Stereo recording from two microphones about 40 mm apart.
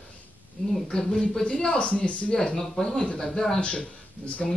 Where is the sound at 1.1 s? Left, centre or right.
Centre.